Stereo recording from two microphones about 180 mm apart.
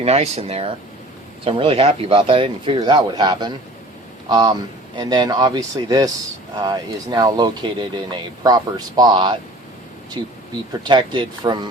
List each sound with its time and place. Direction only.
0.0 s speech: 35° right (ahead or behind)
10.2 s a sound: 25° right (ahead or behind)
10.7 s speech: 25° right (ahead or behind)